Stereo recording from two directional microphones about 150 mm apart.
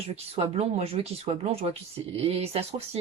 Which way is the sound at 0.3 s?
40° right (ahead or behind).